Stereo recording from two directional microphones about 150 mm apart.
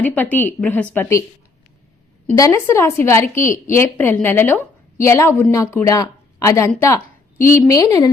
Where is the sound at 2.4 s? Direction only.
15° left (ahead or behind).